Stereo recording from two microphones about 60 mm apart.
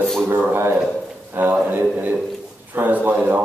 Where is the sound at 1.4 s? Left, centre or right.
Right.